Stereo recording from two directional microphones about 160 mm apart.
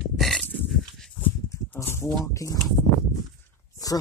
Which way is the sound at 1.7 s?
15° left (ahead or behind).